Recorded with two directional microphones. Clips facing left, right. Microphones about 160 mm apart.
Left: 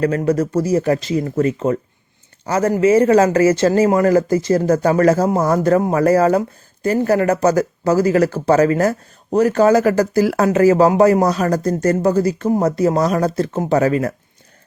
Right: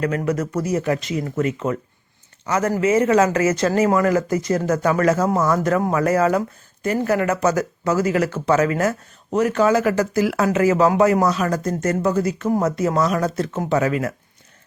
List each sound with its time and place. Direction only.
0.0 s speech: 35° left (ahead or behind)